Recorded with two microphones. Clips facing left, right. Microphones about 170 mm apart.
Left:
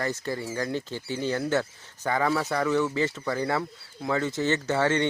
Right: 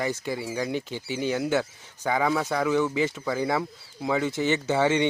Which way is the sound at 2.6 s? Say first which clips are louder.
Right 1 dB; 10° right (ahead or behind).